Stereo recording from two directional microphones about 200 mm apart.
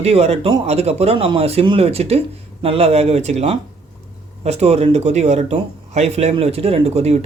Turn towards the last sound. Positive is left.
turn(degrees=-30)  # may be behind; listen again after turning